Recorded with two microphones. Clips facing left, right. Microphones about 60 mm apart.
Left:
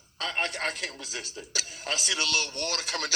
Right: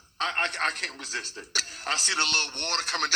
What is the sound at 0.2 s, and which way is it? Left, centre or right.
A man's voice, right.